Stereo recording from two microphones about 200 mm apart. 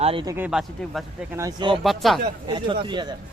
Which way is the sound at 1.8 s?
Centre (ahead or behind).